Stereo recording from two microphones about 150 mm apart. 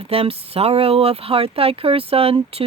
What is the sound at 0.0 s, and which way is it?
Speech, 40° right (ahead or behind).